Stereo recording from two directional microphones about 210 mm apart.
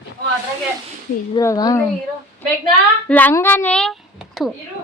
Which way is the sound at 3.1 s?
10° left (ahead or behind).